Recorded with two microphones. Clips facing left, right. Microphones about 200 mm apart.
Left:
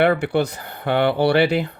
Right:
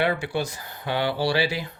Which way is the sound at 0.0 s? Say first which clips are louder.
Left 7 dB; 60° left (ahead or behind).